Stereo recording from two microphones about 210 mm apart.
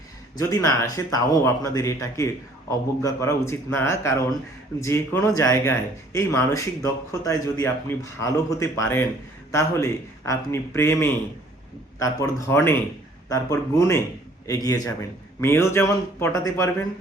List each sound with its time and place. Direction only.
0.3 s speech: 15° left (ahead or behind)